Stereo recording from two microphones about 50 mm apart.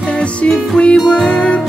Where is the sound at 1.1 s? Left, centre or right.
Centre.